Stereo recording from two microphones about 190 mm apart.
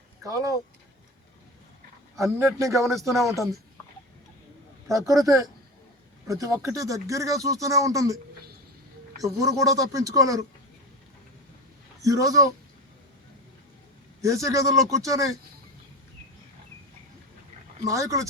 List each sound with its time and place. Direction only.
0.2 s speech: 20° right (ahead or behind)
2.1 s speech: 15° right (ahead or behind)
4.9 s speech: 15° right (ahead or behind)
9.6 s speech: 15° right (ahead or behind)
12.0 s speech: 15° right (ahead or behind)
14.2 s speech: 15° right (ahead or behind)
17.8 s speech: 15° right (ahead or behind)